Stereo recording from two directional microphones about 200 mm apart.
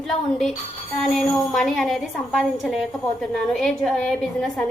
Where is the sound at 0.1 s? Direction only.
Centre (ahead or behind).